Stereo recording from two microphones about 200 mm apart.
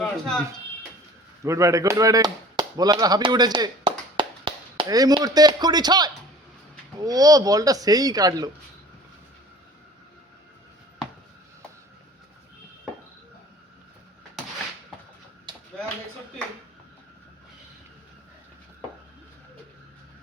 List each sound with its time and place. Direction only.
0.0 s a sound: 5° left (ahead or behind)
1.5 s speech: 15° right (ahead or behind)
15.5 s clapping: 25° right (ahead or behind)